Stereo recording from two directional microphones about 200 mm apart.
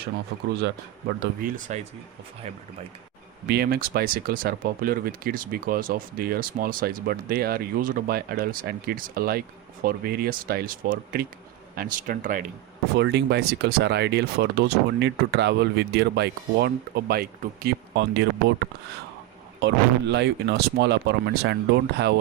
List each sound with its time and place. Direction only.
0.3 s speech: 50° right (ahead or behind)
1.2 s speech: 40° right (ahead or behind)
3.5 s speech: 50° right (ahead or behind)
13.0 s speech: 60° right (ahead or behind)
19.6 s speech: 60° right (ahead or behind)